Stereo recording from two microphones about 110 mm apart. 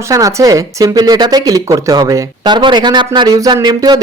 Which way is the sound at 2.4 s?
45° right (ahead or behind).